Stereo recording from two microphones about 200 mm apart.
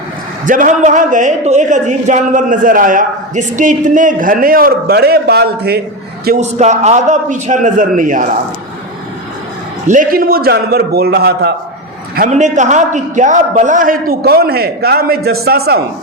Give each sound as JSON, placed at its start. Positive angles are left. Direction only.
{"t": 0.4, "sound": "a woman's voice", "side_deg": -40}
{"t": 6.4, "sound": "a woman's voice", "side_deg": -35}
{"t": 9.8, "sound": "a man's voice", "side_deg": -40}
{"t": 12.1, "sound": "a man's voice", "side_deg": -40}